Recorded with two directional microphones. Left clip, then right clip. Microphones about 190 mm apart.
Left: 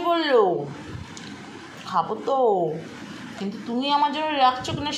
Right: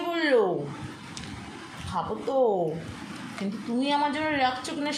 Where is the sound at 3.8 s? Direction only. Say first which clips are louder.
Left 4 dB; 10° left (ahead or behind).